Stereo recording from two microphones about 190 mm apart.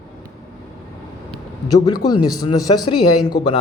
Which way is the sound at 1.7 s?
20° left (ahead or behind).